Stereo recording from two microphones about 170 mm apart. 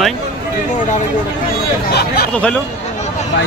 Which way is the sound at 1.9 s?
70° left (ahead or behind).